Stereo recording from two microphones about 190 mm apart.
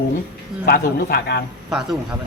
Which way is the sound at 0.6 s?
55° left (ahead or behind).